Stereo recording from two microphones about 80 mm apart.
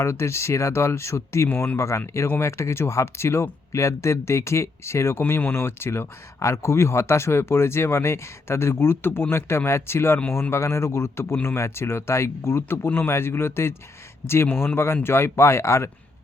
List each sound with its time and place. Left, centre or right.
0.0 s speech: left